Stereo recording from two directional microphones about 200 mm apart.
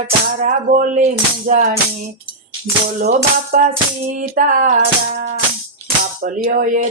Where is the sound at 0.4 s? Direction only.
40° right (ahead or behind).